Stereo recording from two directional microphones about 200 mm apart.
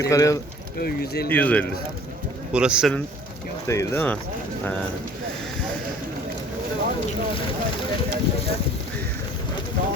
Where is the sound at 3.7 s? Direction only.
15° left (ahead or behind).